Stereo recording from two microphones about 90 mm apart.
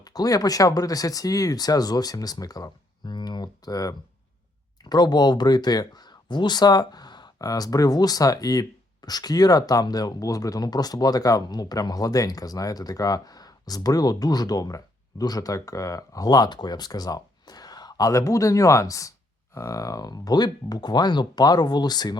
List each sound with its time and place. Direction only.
0.1 s speech: 45° left (ahead or behind)